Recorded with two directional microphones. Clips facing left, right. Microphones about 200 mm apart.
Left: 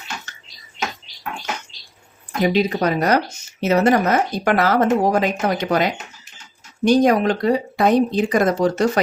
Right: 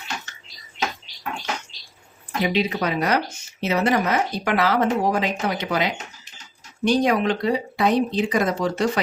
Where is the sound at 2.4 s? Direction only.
45° left (ahead or behind).